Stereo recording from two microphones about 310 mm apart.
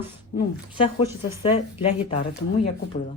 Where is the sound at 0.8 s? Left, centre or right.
Centre.